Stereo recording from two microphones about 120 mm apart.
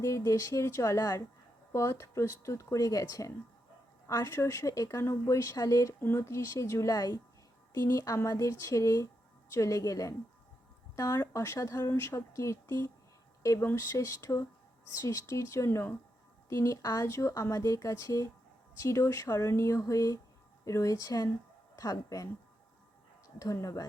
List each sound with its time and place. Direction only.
0.0 s a woman's voice: 25° left (ahead or behind)
23.4 s a woman's voice: 25° left (ahead or behind)